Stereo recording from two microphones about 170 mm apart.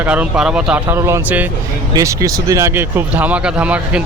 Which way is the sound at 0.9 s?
15° right (ahead or behind).